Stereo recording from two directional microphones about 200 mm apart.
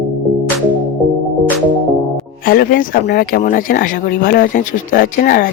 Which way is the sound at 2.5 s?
45° left (ahead or behind).